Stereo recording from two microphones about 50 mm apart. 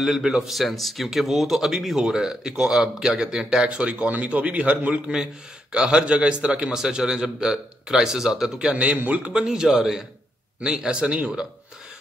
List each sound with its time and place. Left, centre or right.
0.0 s speech: centre; by 5.1 s right
5.1 s speech: centre
8.7 s speech: right
9.3 s speech: centre